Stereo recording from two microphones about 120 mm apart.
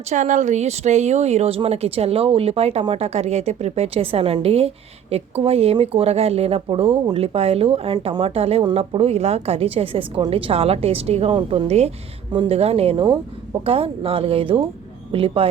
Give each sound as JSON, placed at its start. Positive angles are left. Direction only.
{"t": 0.1, "sound": "a woman's voice", "side_deg": -90}
{"t": 11.3, "sound": "a woman's voice", "side_deg": -50}